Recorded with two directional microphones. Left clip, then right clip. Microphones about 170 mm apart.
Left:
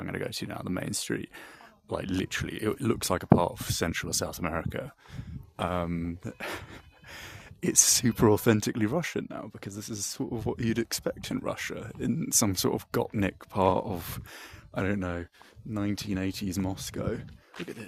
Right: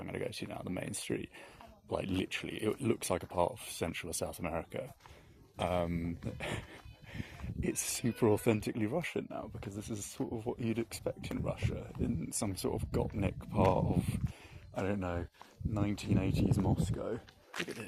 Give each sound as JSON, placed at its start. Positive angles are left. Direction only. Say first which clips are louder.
{"t": 0.0, "sound": "speech", "louder": "left 5 dB", "side_deg": 45}
{"t": 17.5, "sound": "speech", "louder": "right 1 dB", "side_deg": -90}